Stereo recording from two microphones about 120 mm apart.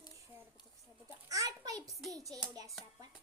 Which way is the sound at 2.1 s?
30° right (ahead or behind).